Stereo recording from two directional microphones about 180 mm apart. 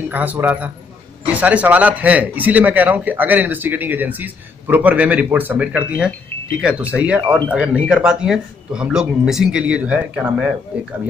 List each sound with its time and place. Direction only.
0.1 s a man's voice: 10° right (ahead or behind)